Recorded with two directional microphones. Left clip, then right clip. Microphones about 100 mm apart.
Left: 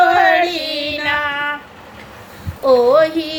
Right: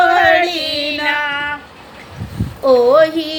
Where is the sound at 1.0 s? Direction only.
25° left (ahead or behind).